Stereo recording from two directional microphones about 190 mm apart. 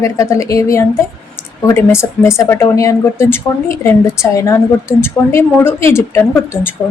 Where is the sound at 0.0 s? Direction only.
15° left (ahead or behind).